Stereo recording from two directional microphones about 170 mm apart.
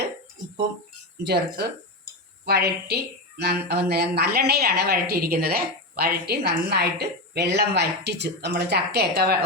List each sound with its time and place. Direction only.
1.2 s a woman's voice: 70° right (ahead or behind)